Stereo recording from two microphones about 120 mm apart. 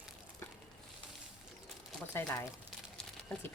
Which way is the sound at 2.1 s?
20° left (ahead or behind).